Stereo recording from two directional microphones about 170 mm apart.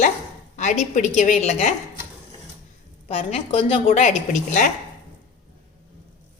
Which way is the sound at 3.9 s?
45° left (ahead or behind).